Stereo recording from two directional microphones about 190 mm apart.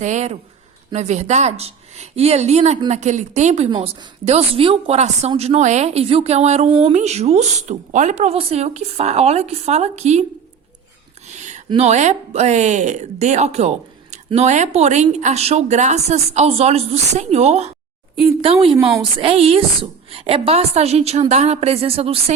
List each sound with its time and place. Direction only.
0.0 s speech: 40° right (ahead or behind)
11.3 s a sound: 40° right (ahead or behind)
11.7 s speech: 35° right (ahead or behind)